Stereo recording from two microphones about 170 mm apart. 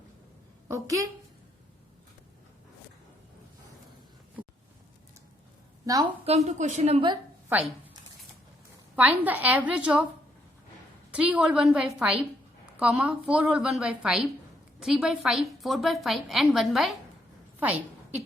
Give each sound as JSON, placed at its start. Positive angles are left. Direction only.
{"t": 0.7, "sound": "a woman's voice", "side_deg": -20}
{"t": 5.8, "sound": "a woman's voice", "side_deg": -20}
{"t": 6.2, "sound": "a woman's voice", "side_deg": -40}
{"t": 9.0, "sound": "a woman's voice", "side_deg": -10}
{"t": 11.1, "sound": "a woman's voice", "side_deg": -5}